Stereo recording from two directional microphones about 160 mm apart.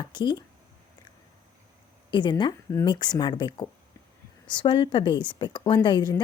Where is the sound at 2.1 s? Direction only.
30° left (ahead or behind).